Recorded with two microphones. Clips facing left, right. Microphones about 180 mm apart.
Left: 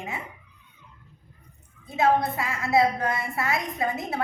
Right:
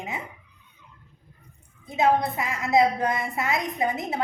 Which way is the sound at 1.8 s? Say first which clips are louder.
Even; 20° right (ahead or behind).